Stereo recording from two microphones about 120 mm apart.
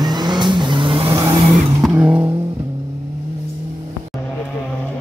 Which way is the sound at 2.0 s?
15° right (ahead or behind).